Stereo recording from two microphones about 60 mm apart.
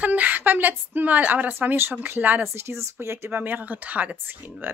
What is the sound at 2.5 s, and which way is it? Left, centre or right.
Speech, right.